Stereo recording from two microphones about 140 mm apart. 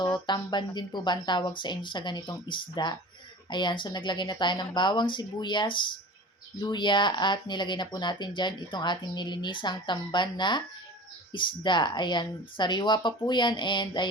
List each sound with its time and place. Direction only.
0.3 s speech: 30° left (ahead or behind)